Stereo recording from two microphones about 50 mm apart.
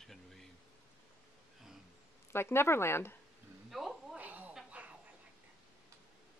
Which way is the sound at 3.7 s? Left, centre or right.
Centre.